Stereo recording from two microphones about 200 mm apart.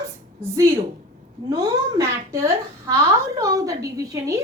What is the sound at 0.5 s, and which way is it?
A woman's voice, 15° right (ahead or behind).